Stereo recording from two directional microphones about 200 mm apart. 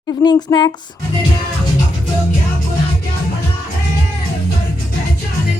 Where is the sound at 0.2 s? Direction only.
20° left (ahead or behind).